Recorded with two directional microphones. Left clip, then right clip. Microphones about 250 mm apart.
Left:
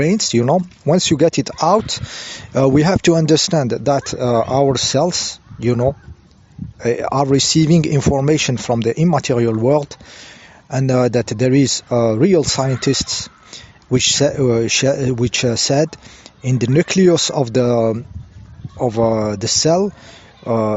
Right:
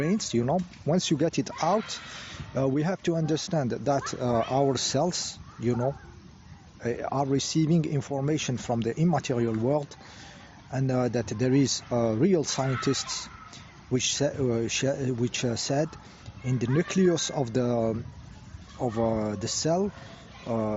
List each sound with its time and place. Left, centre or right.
0.0 s speech: left